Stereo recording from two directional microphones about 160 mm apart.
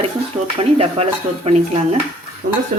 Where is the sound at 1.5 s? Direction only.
40° right (ahead or behind).